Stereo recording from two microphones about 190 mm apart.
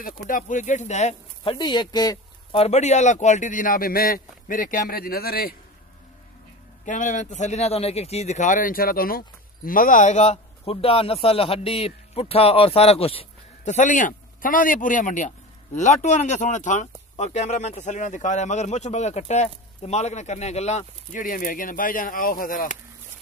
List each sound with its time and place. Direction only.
0.3 s a man's voice: 40° left (ahead or behind)
6.8 s a man's voice: 40° left (ahead or behind)